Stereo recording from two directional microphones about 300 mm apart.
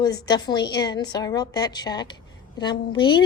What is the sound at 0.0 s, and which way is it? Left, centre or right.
A woman's voice, centre.